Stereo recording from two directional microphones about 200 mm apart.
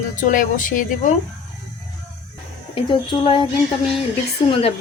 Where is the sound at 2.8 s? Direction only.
25° left (ahead or behind).